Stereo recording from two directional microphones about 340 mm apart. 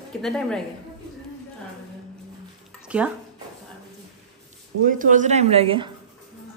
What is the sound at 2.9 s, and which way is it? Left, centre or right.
Speech, centre.